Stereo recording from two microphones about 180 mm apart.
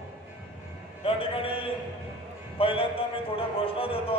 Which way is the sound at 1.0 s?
30° left (ahead or behind).